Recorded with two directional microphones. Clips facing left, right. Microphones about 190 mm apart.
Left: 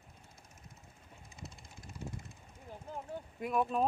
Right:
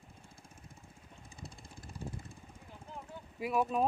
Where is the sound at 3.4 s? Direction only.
5° right (ahead or behind).